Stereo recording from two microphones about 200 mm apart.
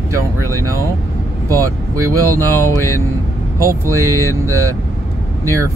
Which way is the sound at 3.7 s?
15° right (ahead or behind).